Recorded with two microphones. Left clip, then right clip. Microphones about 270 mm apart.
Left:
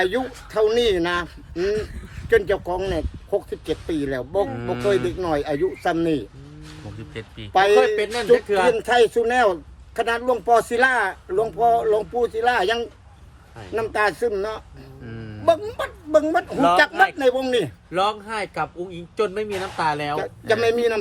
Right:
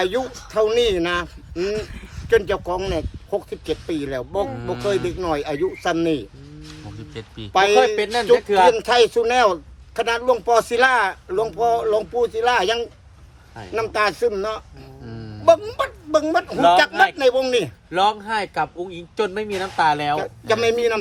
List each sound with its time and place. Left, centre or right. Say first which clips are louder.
0.0 s speech: even; centre
7.8 s speech: right 2 dB; right
8.7 s a man's voice: right 1 dB; centre
17.9 s speech: right 4 dB; right
20.1 s speech: right 1 dB; centre